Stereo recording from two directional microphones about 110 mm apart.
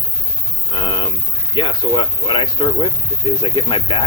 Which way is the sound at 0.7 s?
45° left (ahead or behind).